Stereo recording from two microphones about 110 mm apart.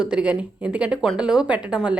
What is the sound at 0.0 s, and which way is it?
Speech, 10° right (ahead or behind).